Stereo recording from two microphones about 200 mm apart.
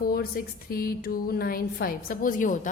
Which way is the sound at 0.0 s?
50° left (ahead or behind).